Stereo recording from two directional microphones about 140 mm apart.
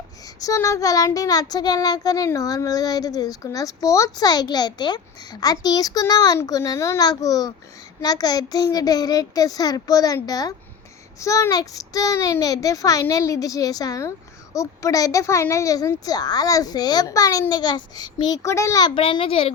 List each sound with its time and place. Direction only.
0.4 s child singing: 20° left (ahead or behind)
18.9 s a child's voice: 40° left (ahead or behind)